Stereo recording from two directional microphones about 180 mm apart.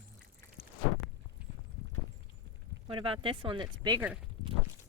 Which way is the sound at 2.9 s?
30° right (ahead or behind).